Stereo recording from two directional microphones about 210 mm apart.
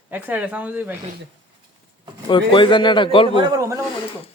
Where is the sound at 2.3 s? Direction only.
20° left (ahead or behind).